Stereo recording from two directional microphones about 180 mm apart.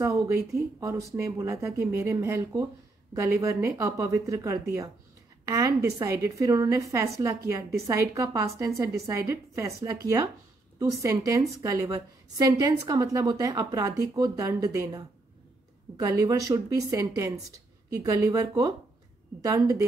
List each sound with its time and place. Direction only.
0.5 s a woman's voice: 15° right (ahead or behind)